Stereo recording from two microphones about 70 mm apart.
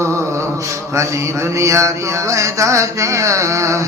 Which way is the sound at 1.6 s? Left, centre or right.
Right.